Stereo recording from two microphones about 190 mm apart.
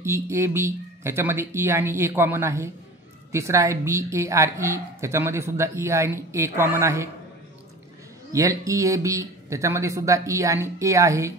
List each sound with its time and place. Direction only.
0.0 s a woman's voice: 15° right (ahead or behind)
8.3 s a woman's voice: 15° right (ahead or behind)